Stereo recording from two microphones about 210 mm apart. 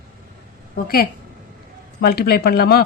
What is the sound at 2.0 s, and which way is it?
Speech, 45° left (ahead or behind).